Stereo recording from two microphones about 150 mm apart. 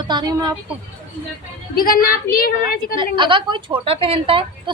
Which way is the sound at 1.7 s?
75° left (ahead or behind).